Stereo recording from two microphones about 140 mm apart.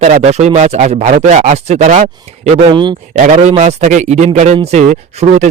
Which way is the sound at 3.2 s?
55° right (ahead or behind).